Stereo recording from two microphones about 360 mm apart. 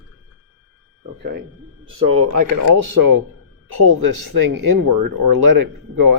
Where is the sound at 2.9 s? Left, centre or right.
Right.